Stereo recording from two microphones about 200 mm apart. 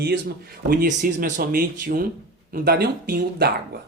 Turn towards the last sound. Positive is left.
turn(degrees=-55)  # may be behind; listen again after turning